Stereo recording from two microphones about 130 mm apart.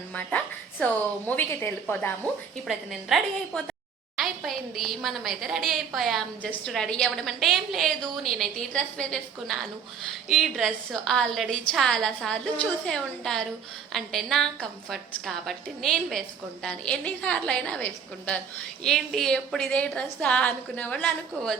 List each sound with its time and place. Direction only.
0.1 s a woman's voice: 10° left (ahead or behind)
2.6 s a woman's voice: centre (ahead or behind)